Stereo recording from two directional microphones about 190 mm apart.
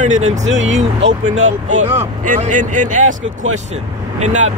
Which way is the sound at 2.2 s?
45° right (ahead or behind).